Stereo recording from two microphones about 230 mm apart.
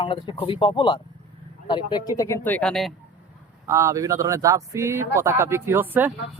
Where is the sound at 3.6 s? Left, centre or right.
Centre.